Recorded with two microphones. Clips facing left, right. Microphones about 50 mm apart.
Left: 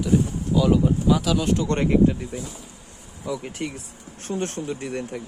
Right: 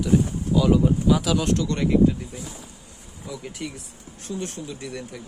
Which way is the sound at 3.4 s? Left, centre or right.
Left.